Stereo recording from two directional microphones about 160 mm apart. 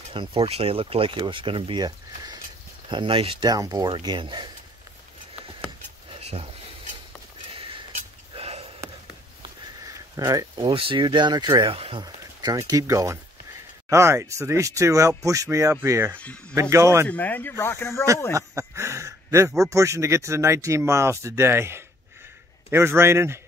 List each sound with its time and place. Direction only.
0.1 s speech: 35° right (ahead or behind)
7.5 s a sound: 35° right (ahead or behind)
10.1 s speech: 20° right (ahead or behind)
10.7 s speech: 35° right (ahead or behind); by 16.2 s 15° right (ahead or behind)
16.2 s speech: 10° left (ahead or behind)
16.5 s speech: 15° right (ahead or behind)
17.1 s speech: 10° left (ahead or behind)
18.3 s speech: 20° right (ahead or behind)